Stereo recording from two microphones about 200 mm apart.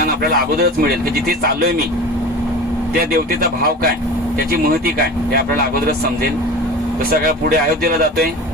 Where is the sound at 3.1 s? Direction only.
50° right (ahead or behind).